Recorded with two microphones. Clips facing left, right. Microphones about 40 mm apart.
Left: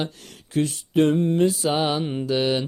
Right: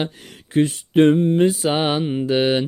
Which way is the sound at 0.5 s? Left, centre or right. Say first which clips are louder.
Right 5 dB; right.